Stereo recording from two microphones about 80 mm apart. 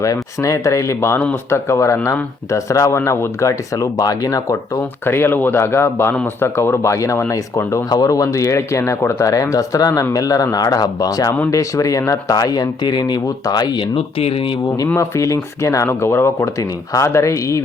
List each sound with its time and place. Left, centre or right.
0.0 s speech: left
5.0 s speech: left
14.9 s speech: left